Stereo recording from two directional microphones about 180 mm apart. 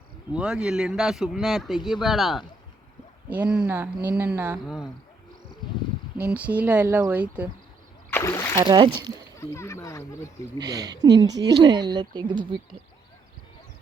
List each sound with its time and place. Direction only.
0.3 s a man's voice: 5° right (ahead or behind)
3.5 s cricket: 10° right (ahead or behind)
6.3 s cricket: 10° right (ahead or behind)
8.1 s speech: 15° left (ahead or behind)
8.5 s speech: 25° right (ahead or behind)
9.4 s speech: 15° left (ahead or behind)
10.6 s speech: 20° right (ahead or behind)